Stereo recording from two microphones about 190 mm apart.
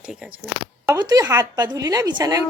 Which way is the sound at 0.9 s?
20° right (ahead or behind).